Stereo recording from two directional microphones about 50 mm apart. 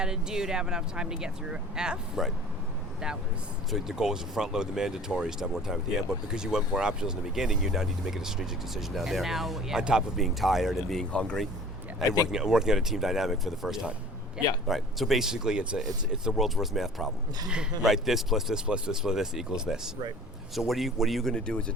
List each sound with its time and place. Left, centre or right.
0.0 s speech: centre
3.7 s speech: centre
9.7 s speech: centre
10.2 s speech: centre
11.1 s speech: left
11.9 s speech: centre
20.6 s speech: centre
21.2 s speech: centre